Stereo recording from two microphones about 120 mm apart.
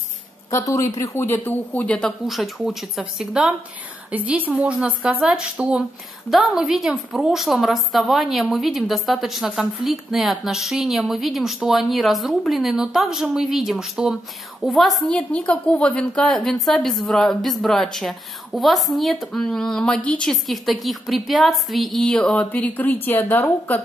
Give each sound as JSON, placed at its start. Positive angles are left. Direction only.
{"t": 0.5, "sound": "a woman's voice", "side_deg": 25}